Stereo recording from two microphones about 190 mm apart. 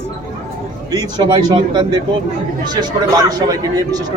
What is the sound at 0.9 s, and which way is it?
Speech, 20° right (ahead or behind).